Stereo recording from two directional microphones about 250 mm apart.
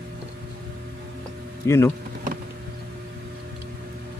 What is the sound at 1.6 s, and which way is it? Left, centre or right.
Speech, centre.